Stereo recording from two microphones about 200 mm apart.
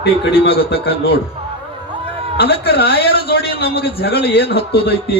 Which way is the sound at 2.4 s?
55° left (ahead or behind).